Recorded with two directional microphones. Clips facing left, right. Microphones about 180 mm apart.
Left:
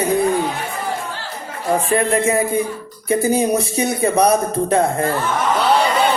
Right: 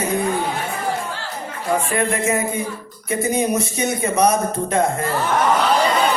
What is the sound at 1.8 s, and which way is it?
A man's voice, 35° left (ahead or behind).